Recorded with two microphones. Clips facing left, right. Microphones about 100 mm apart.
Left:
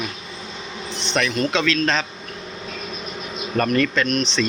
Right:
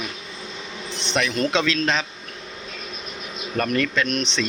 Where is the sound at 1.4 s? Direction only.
25° right (ahead or behind).